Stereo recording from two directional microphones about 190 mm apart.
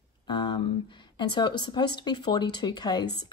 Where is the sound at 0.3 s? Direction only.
25° left (ahead or behind).